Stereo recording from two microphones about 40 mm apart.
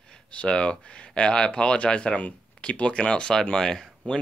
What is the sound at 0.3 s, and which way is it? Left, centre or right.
Speech, left.